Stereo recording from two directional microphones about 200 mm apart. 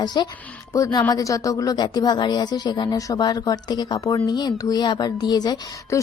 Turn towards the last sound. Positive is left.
turn(degrees=15)  # may be behind; listen again after turning